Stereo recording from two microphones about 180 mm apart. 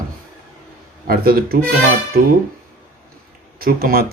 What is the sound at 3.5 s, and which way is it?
Speech, 55° right (ahead or behind).